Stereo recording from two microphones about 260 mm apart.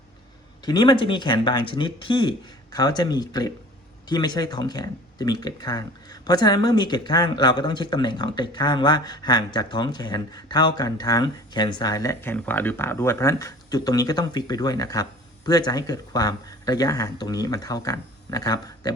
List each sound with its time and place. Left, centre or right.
0.6 s speech: centre